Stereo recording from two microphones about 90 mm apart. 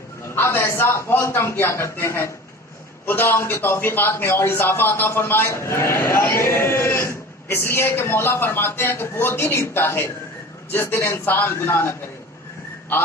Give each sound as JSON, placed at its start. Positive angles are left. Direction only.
{"t": 0.3, "sound": "a man's voice", "side_deg": 25}